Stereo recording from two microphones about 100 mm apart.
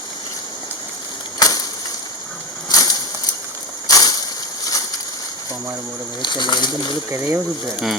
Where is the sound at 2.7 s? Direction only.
40° left (ahead or behind).